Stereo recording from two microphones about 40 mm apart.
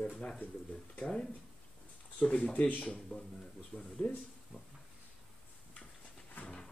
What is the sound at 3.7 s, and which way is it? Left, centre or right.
Speech, left.